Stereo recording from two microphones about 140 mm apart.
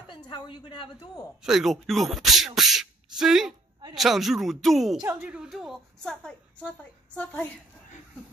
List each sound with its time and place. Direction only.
0.1 s a woman's voice: 35° left (ahead or behind)
1.4 s a woman's voice: 5° right (ahead or behind)